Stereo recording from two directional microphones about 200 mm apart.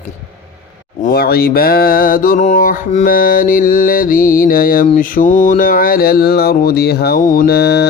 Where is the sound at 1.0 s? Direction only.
50° left (ahead or behind).